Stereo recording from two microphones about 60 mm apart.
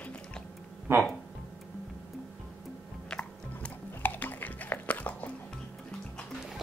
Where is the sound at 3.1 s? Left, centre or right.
Centre.